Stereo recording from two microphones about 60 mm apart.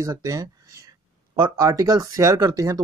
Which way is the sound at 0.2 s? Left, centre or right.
Right.